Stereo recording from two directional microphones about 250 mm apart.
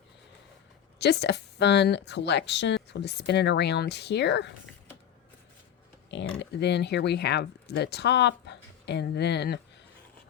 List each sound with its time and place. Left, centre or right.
0.9 s speech: left
6.1 s speech: left